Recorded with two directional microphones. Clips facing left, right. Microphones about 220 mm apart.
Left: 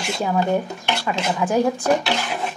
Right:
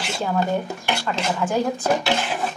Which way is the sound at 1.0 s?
15° left (ahead or behind).